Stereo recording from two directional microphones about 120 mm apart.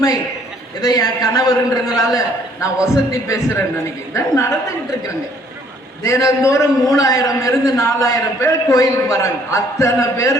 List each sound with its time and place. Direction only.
0.8 s a man's voice: 30° left (ahead or behind)
6.0 s a man's voice: 25° left (ahead or behind)